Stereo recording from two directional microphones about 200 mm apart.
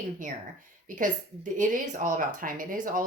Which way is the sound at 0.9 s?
40° right (ahead or behind).